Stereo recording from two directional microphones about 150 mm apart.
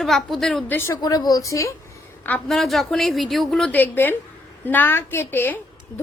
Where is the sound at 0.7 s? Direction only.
20° left (ahead or behind).